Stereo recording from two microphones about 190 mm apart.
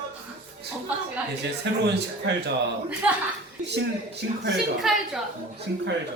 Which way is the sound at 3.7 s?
65° right (ahead or behind).